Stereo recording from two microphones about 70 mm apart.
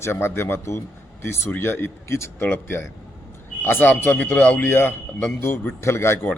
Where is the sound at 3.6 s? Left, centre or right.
Left.